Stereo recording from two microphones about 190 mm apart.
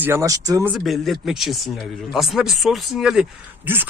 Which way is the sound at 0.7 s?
Centre (ahead or behind).